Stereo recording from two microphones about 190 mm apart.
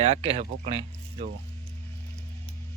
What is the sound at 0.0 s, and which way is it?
Speech, 30° right (ahead or behind).